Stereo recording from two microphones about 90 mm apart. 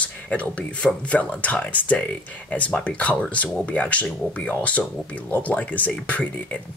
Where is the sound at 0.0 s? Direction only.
15° left (ahead or behind).